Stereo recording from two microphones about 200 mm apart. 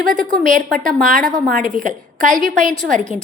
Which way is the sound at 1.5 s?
45° right (ahead or behind).